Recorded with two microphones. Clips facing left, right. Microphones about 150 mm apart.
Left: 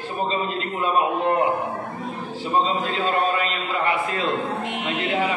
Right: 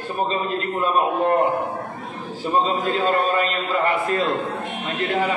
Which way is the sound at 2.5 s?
45° right (ahead or behind).